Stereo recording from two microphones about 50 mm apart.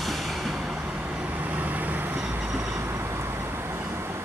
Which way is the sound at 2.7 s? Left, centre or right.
Right.